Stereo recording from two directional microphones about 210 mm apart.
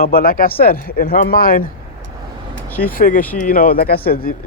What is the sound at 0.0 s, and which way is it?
Speech, 45° left (ahead or behind).